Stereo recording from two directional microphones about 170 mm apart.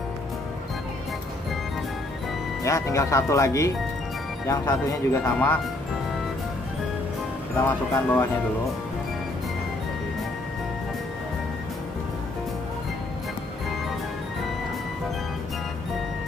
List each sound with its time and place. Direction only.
2.6 s speech: 20° left (ahead or behind)
5.2 s speech: 10° left (ahead or behind)
7.6 s speech: 10° left (ahead or behind)